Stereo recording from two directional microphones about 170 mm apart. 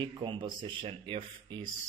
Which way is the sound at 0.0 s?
30° right (ahead or behind).